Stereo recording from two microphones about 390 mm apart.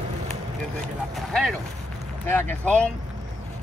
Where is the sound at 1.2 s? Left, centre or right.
Centre.